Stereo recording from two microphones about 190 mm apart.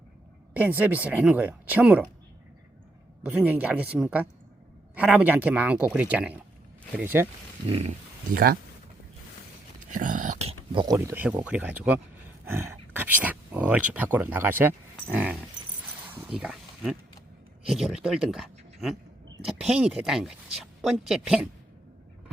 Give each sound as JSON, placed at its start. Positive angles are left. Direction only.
{"t": 0.5, "sound": "speech", "side_deg": -10}
{"t": 3.2, "sound": "speech", "side_deg": -10}
{"t": 7.7, "sound": "speech", "side_deg": -35}
{"t": 9.8, "sound": "speech", "side_deg": -45}
{"t": 10.7, "sound": "speech", "side_deg": -20}
{"t": 16.1, "sound": "a sound", "side_deg": -5}
{"t": 17.7, "sound": "speech", "side_deg": 0}